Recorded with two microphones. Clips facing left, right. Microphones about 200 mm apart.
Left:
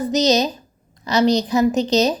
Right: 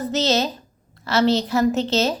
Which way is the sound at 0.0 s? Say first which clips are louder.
Left 4 dB; 15° left (ahead or behind).